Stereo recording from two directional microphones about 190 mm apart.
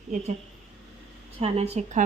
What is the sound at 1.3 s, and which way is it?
Speech, 35° right (ahead or behind).